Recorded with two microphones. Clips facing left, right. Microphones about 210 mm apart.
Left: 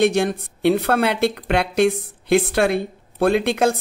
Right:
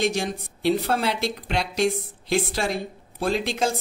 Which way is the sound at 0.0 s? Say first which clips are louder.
Left 7 dB; 60° left (ahead or behind).